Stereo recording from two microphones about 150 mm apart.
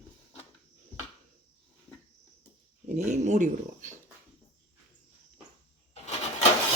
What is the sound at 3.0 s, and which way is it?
Speech, 50° right (ahead or behind).